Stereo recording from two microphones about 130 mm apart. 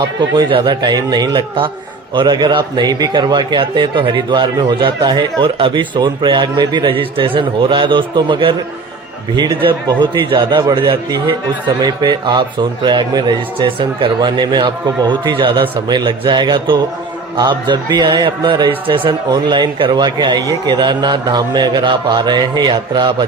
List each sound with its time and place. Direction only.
0.2 s a man's voice: 35° right (ahead or behind)
9.8 s a man's voice: 35° right (ahead or behind)